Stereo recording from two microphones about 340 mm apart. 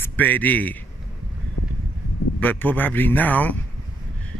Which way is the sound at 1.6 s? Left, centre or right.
Left.